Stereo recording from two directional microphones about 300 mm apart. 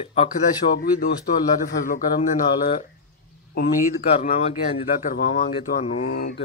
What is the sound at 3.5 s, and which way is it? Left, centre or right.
Speech, left.